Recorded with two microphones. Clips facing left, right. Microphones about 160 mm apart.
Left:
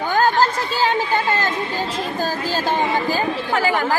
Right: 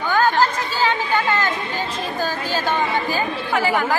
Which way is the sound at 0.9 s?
40° left (ahead or behind).